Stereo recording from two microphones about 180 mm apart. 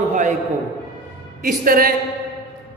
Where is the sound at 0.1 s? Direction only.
45° right (ahead or behind).